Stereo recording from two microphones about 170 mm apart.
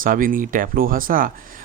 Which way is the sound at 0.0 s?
55° right (ahead or behind).